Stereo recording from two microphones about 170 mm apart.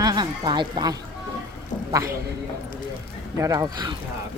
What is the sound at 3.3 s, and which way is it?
Speech, 20° right (ahead or behind).